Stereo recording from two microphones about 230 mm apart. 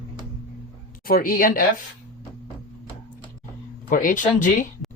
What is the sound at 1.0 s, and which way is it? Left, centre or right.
Speech, left.